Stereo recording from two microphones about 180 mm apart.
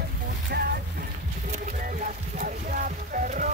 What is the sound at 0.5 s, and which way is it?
Boat, 65° right (ahead or behind).